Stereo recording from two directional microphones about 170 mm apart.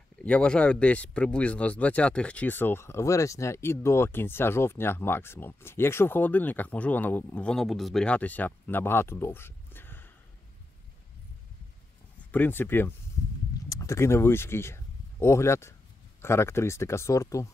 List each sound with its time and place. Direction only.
0.2 s speech: 5° left (ahead or behind)
12.3 s speech: 10° left (ahead or behind)